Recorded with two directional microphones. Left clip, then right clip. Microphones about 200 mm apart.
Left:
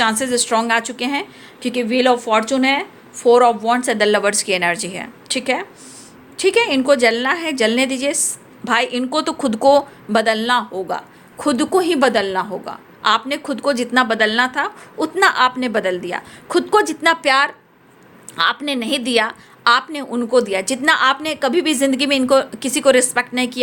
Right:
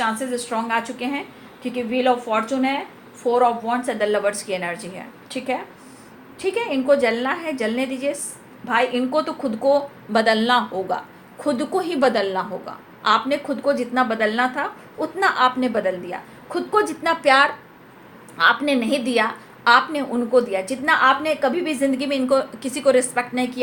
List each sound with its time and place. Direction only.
0.0 s a woman's voice: 55° left (ahead or behind)